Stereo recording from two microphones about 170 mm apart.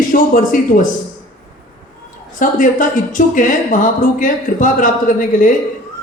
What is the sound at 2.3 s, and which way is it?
Speech, 50° left (ahead or behind).